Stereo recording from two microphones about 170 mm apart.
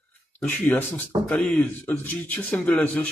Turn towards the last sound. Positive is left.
turn(degrees=10)  # may be behind; listen again after turning